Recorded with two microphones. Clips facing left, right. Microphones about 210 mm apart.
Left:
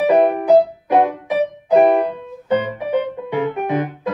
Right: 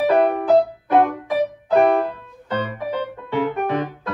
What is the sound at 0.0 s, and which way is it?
Music, 15° left (ahead or behind).